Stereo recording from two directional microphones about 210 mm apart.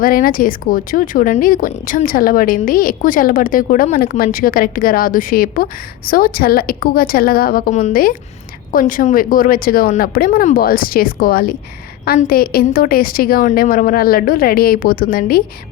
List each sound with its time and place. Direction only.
0.0 s a woman's voice: 40° left (ahead or behind)